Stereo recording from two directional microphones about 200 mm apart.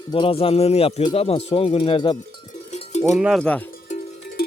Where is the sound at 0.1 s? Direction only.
25° left (ahead or behind).